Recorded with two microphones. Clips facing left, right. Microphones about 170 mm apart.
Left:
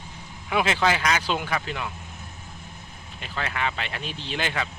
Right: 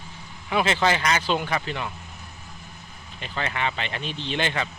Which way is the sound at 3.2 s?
Centre (ahead or behind).